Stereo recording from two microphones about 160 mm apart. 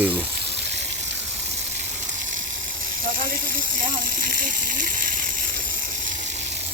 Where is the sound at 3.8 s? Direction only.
60° right (ahead or behind).